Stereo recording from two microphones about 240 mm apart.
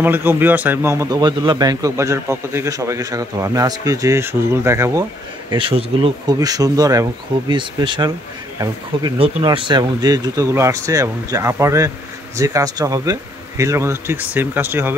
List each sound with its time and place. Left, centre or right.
0.0 s a man's voice: centre